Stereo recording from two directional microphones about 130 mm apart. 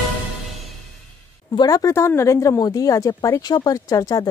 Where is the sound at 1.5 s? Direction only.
30° left (ahead or behind).